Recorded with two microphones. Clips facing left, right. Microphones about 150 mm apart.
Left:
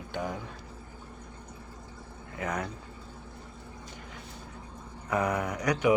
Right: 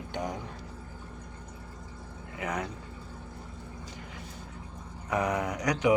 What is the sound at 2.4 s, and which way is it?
Speech, 15° right (ahead or behind).